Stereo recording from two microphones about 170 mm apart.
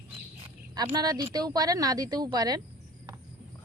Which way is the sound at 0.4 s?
25° right (ahead or behind).